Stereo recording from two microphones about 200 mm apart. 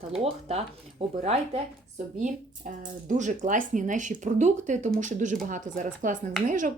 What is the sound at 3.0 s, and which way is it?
Speech, 40° right (ahead or behind).